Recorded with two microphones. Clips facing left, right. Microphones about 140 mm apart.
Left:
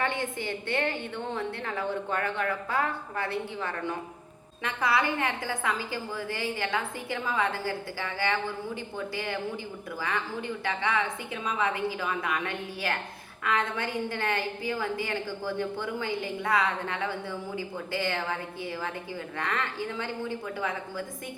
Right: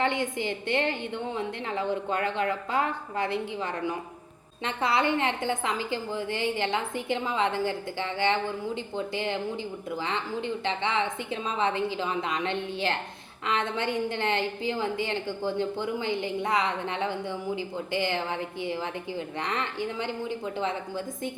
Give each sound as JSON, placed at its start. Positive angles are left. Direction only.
{"t": 0.0, "sound": "a woman's voice", "side_deg": -15}